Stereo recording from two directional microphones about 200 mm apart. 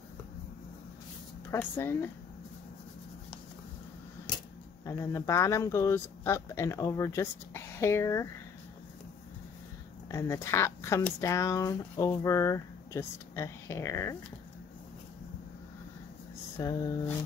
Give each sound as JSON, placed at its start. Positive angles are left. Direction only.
{"t": 1.5, "sound": "speech", "side_deg": 10}
{"t": 4.8, "sound": "speech", "side_deg": 15}
{"t": 10.1, "sound": "speech", "side_deg": 15}
{"t": 16.6, "sound": "a sound", "side_deg": 20}